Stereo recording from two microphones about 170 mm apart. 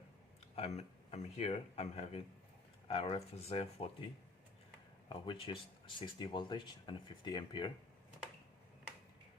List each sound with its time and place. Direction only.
0.5 s speech: 40° left (ahead or behind)
5.0 s speech: 25° left (ahead or behind)